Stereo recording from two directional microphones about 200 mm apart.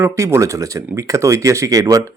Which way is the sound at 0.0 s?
15° right (ahead or behind).